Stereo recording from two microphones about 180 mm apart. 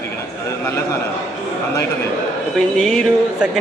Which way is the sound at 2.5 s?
Centre (ahead or behind).